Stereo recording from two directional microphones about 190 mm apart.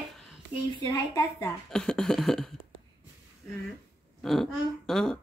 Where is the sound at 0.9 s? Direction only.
20° left (ahead or behind).